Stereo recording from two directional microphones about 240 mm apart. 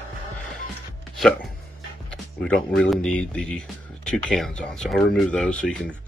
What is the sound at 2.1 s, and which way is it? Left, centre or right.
Speech, centre.